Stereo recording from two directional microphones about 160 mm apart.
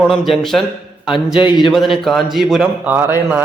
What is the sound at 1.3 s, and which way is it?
Speech, 30° left (ahead or behind).